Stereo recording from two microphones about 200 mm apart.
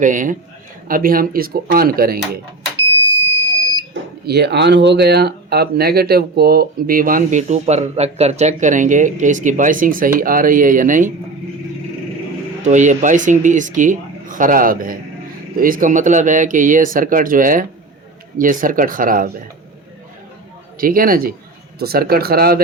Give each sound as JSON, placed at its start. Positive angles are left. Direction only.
{"t": 0.0, "sound": "speech", "side_deg": -40}
{"t": 4.3, "sound": "speech", "side_deg": -55}
{"t": 12.6, "sound": "speech", "side_deg": -35}
{"t": 20.7, "sound": "speech", "side_deg": -45}